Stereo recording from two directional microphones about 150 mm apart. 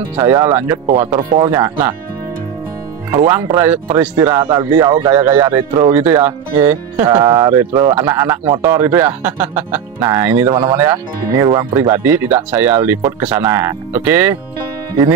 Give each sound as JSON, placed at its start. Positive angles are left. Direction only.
{"t": 0.2, "sound": "speech", "side_deg": -15}
{"t": 1.3, "sound": "speech", "side_deg": -30}
{"t": 3.1, "sound": "speech", "side_deg": -15}
{"t": 10.5, "sound": "speech", "side_deg": -30}
{"t": 10.8, "sound": "speech", "side_deg": -15}
{"t": 11.4, "sound": "speech", "side_deg": -30}
{"t": 11.9, "sound": "speech", "side_deg": -15}